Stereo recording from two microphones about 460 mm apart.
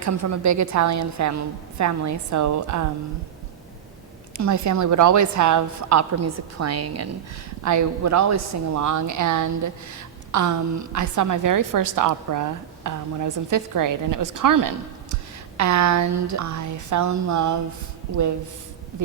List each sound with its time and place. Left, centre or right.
0.0 s a woman's voice: right
4.4 s a woman's voice: right